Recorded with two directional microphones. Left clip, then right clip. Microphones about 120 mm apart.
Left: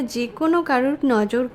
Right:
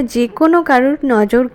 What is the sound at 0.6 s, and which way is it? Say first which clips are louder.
Speech: right 7 dB; 30° right (ahead or behind).